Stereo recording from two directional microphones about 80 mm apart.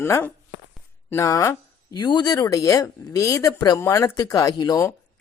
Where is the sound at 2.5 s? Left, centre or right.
Left.